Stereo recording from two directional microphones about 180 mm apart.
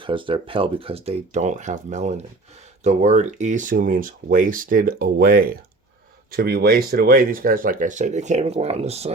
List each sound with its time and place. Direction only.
0.0 s speech: 30° right (ahead or behind)